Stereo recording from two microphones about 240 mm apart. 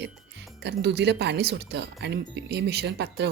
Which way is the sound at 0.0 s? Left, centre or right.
Right.